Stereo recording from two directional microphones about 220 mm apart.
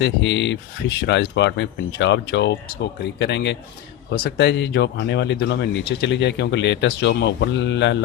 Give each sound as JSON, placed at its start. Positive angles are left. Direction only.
{"t": 0.0, "sound": "speech", "side_deg": 55}